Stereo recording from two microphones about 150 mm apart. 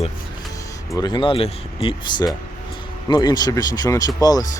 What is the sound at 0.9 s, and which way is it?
Speech, 30° left (ahead or behind).